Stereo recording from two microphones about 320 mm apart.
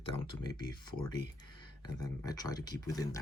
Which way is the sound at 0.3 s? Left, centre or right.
Centre.